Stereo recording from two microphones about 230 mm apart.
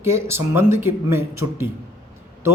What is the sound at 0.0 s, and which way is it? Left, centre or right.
Speech, centre.